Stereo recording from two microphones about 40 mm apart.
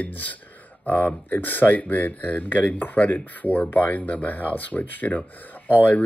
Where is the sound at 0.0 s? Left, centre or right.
Left.